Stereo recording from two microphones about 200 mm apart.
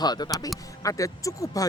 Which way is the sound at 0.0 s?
20° left (ahead or behind).